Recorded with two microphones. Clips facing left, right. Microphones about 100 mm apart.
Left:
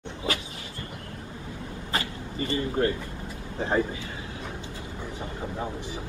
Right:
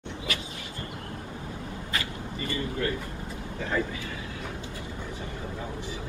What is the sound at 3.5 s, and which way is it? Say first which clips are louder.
Speech: left 4 dB; 25° left (ahead or behind).